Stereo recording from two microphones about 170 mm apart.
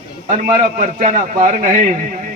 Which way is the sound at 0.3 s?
50° right (ahead or behind).